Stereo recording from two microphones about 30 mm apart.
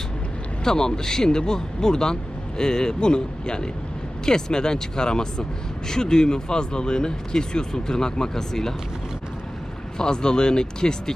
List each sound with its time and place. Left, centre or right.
0.6 s speech: left
10.0 s speech: left